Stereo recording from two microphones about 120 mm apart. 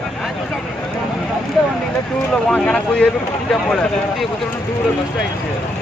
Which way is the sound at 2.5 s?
10° left (ahead or behind).